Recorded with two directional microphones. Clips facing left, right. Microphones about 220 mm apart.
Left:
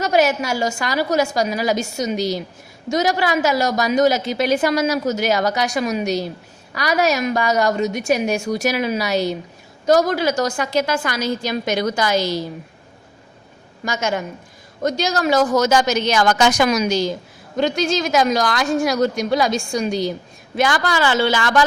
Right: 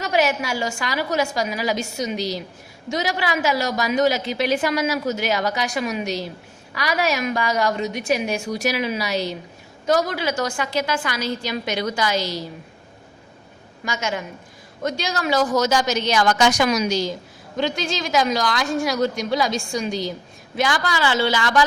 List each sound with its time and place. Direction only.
0.0 s a woman's voice: 40° left (ahead or behind)
13.8 s a woman's voice: 40° left (ahead or behind)